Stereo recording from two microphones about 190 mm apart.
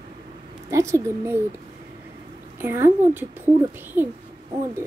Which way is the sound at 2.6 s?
15° right (ahead or behind).